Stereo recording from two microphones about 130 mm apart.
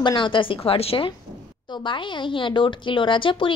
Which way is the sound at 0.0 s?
35° left (ahead or behind).